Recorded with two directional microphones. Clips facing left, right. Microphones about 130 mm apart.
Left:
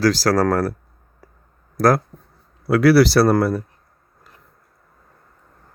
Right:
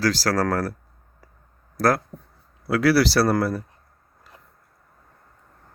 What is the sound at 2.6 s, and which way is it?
Speech, 55° left (ahead or behind).